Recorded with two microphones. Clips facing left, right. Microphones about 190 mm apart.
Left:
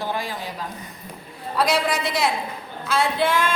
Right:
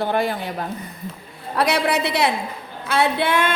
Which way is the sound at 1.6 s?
65° right (ahead or behind).